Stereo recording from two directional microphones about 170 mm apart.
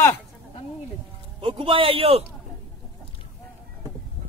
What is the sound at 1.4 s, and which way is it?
Speech, 30° right (ahead or behind).